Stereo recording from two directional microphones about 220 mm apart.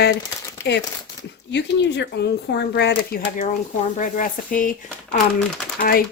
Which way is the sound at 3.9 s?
35° left (ahead or behind).